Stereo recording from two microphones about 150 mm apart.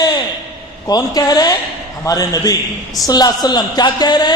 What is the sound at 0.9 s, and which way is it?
A woman's voice, 25° left (ahead or behind).